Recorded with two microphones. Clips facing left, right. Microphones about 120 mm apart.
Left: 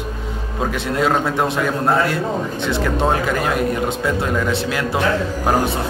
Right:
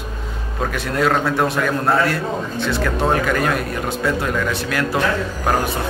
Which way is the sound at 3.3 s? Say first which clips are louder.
Right 1 dB; 20° left (ahead or behind).